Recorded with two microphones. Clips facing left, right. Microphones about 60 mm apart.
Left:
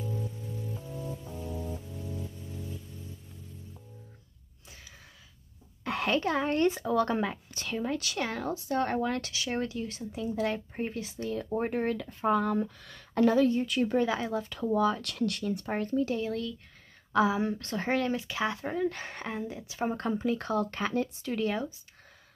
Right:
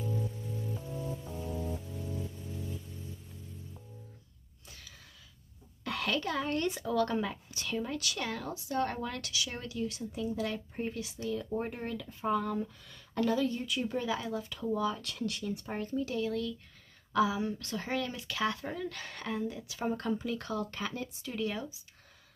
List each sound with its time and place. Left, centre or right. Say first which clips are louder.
0.0 s music: even; centre
5.9 s speech: left 5 dB; left
13.2 s speech: left 6 dB; left
14.7 s speech: left 5 dB; left
16.1 s speech: left 2 dB; left
18.2 s speech: left 2 dB; left